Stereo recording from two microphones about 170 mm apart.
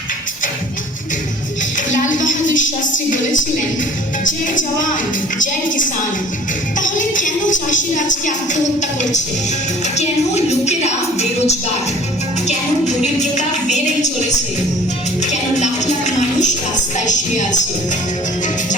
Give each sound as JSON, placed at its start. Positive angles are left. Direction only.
{"t": 1.9, "sound": "a sound", "side_deg": 50}
{"t": 4.2, "sound": "speech", "side_deg": 50}
{"t": 9.8, "sound": "music", "side_deg": 40}
{"t": 12.5, "sound": "speech", "side_deg": 45}
{"t": 15.2, "sound": "music", "side_deg": 45}
{"t": 17.1, "sound": "speech", "side_deg": 45}